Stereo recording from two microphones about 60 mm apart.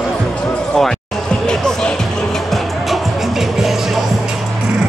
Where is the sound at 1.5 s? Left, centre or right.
Centre.